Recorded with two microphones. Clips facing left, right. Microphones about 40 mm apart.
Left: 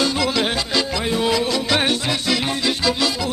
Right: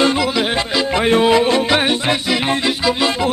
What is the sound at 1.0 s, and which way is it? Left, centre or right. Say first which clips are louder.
Music: right 10 dB; right.